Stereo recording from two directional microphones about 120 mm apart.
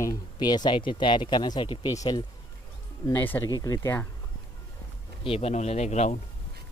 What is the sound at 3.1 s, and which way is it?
Speech, 15° left (ahead or behind).